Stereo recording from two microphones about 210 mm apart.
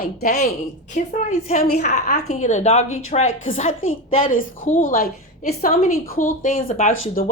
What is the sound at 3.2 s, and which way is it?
Speech, 70° left (ahead or behind).